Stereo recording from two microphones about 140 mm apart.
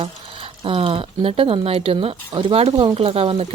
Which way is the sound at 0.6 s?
40° right (ahead or behind).